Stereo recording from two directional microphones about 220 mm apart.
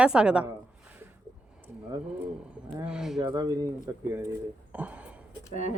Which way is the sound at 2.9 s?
Centre (ahead or behind).